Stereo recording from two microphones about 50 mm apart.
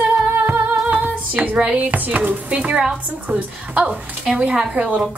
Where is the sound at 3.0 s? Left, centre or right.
Right.